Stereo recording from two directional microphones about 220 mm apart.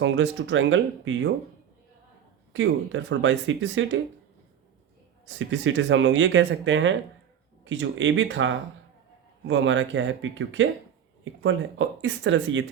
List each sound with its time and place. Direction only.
0.0 s speech: 60° right (ahead or behind)
2.5 s speech: 60° right (ahead or behind)
5.4 s speech: 60° right (ahead or behind)